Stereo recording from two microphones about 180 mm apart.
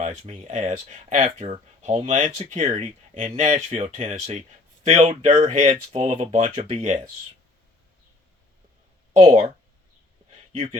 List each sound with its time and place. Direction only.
0.0 s speech: 40° right (ahead or behind)
6.4 s speech: 50° right (ahead or behind)
6.7 s speech: 40° right (ahead or behind)
10.5 s speech: 30° right (ahead or behind)